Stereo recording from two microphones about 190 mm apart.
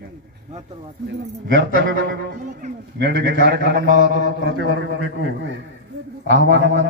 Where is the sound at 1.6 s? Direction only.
70° right (ahead or behind).